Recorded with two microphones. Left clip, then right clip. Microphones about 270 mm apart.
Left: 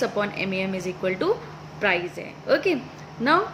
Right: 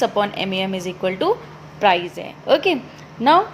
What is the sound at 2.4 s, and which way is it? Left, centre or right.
Speech, centre.